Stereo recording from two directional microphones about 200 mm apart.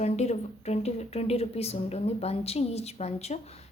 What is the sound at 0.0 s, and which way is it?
Speech, 35° left (ahead or behind).